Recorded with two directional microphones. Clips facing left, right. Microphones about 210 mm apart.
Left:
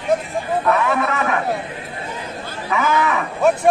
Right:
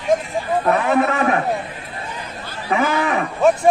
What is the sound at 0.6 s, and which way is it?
Speech, 30° right (ahead or behind).